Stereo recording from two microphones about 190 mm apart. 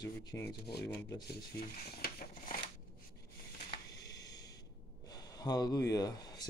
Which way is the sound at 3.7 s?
20° left (ahead or behind).